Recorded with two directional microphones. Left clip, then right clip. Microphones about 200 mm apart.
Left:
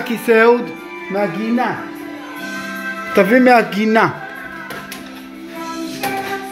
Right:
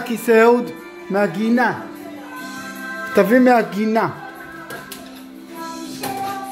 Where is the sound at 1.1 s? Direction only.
40° right (ahead or behind).